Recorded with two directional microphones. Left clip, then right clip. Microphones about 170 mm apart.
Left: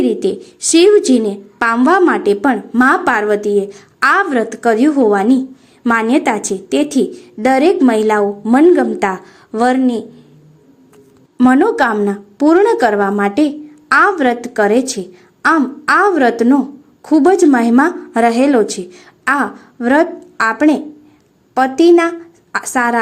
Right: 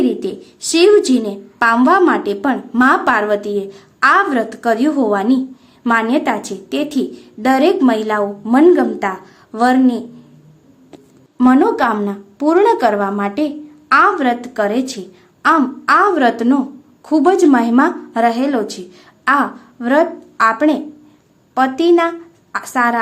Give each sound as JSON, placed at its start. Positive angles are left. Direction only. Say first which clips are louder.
{"t": 0.0, "sound": "a woman's voice", "louder": "left 3 dB", "side_deg": 25}
{"t": 11.4, "sound": "a woman's voice", "louder": "left 1 dB", "side_deg": 25}